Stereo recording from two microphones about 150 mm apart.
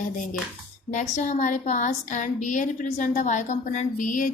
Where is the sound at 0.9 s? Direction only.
55° left (ahead or behind).